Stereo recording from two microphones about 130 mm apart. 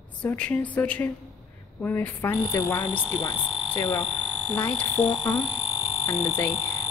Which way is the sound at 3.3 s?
5° right (ahead or behind).